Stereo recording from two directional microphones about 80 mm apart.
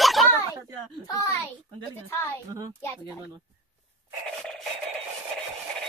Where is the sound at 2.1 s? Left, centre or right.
Left.